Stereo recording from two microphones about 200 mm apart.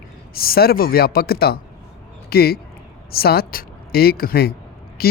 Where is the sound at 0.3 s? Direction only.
50° left (ahead or behind).